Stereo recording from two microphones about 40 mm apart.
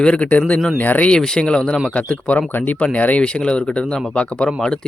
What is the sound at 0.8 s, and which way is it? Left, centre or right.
Speech, left.